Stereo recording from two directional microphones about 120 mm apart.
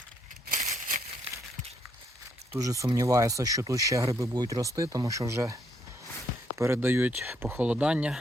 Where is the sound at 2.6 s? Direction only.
30° right (ahead or behind).